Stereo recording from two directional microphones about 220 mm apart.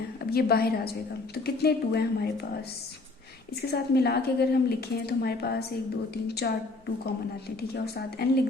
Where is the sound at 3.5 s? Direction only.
45° left (ahead or behind).